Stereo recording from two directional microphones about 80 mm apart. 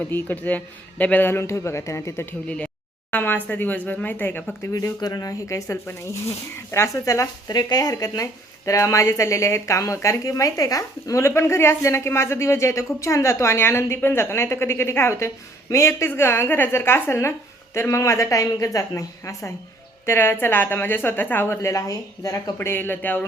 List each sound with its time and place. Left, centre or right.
0.1 s speech: left
3.1 s speech: left
4.9 s speech: left
7.5 s speech: left
22.5 s speech: left